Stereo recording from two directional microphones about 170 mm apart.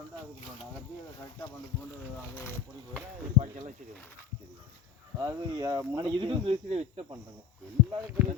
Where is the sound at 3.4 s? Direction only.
30° right (ahead or behind).